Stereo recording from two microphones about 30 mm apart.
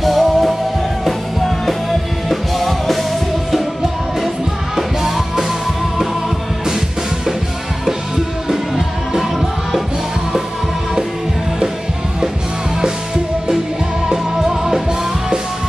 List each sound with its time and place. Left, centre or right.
0.0 s music: centre
4.7 s music: centre
8.5 s music: centre
14.0 s music: centre